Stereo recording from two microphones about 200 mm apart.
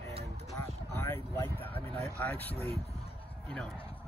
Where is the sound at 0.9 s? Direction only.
10° left (ahead or behind).